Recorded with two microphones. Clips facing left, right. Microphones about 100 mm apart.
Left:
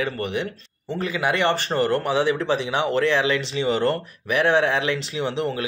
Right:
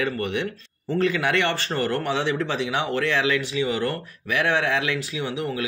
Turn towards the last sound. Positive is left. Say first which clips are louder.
# left 3 dB
turn(degrees=25)  # may be behind; listen again after turning